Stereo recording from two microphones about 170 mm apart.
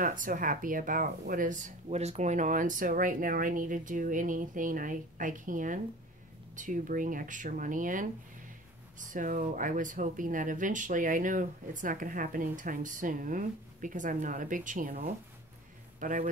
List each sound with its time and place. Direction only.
0.0 s speech: 50° right (ahead or behind)